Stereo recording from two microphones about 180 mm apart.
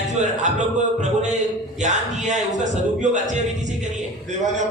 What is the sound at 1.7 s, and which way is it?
Speech, 40° right (ahead or behind).